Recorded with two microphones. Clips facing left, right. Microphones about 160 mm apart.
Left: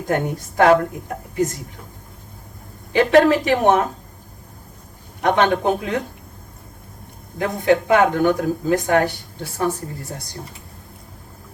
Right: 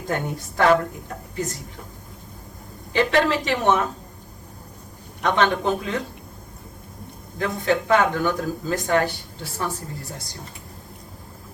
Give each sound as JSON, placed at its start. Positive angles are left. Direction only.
{"t": 0.1, "sound": "speech", "side_deg": 55}
{"t": 2.9, "sound": "speech", "side_deg": 55}
{"t": 5.2, "sound": "speech", "side_deg": 55}
{"t": 7.4, "sound": "speech", "side_deg": 55}